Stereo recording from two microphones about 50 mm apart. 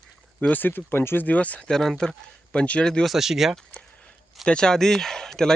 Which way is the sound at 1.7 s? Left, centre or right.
Centre.